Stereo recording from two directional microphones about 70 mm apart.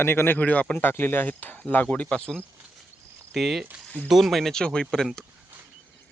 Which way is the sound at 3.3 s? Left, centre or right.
Centre.